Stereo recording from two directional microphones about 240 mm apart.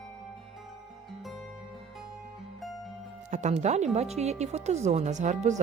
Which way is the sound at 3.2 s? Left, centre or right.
Right.